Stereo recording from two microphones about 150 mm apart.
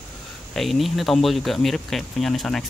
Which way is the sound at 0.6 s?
Centre (ahead or behind).